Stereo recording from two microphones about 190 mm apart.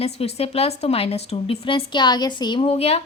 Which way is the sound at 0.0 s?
35° left (ahead or behind).